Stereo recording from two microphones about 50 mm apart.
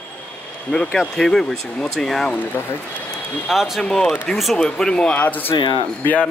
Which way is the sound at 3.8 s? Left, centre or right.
Centre.